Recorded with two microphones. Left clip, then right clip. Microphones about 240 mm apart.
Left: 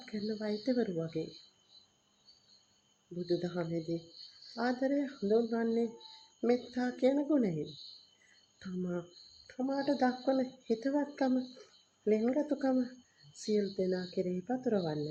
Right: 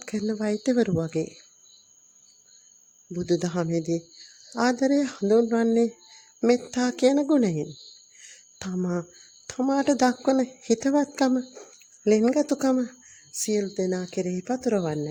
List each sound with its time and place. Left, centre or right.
0.0 s a woman's voice: right
3.2 s a woman's voice: right
8.5 s a woman's voice: right